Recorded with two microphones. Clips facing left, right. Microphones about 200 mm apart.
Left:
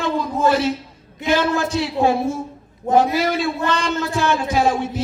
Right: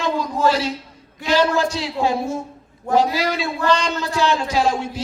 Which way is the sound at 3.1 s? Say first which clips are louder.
Left 3 dB; 55° left (ahead or behind).